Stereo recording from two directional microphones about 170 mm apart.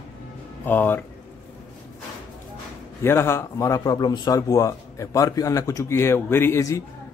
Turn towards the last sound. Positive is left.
turn(degrees=20)  # may be behind; listen again after turning